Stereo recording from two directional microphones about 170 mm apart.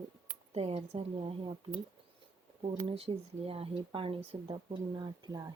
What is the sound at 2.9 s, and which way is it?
Speech, 35° right (ahead or behind).